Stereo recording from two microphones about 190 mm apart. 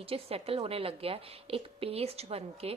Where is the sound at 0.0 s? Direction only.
30° right (ahead or behind).